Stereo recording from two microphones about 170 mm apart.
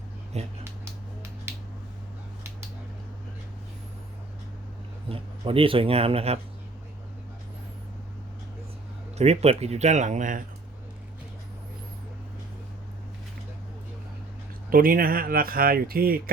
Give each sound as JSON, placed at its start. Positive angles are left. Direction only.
{"t": 0.3, "sound": "speech", "side_deg": -40}
{"t": 1.5, "sound": "finger snapping", "side_deg": -15}
{"t": 5.1, "sound": "speech", "side_deg": -30}
{"t": 9.1, "sound": "speech", "side_deg": -40}
{"t": 14.7, "sound": "speech", "side_deg": -55}